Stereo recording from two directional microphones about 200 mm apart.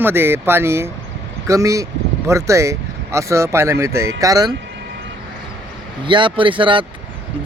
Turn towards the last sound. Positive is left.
turn(degrees=-25)  # may be behind; listen again after turning